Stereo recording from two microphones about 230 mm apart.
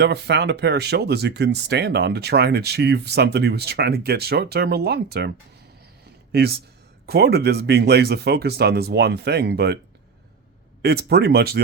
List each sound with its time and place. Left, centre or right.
0.0 s speech: right
7.1 s speech: right
10.8 s speech: right